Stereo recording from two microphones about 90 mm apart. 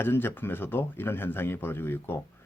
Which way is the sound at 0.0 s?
25° left (ahead or behind).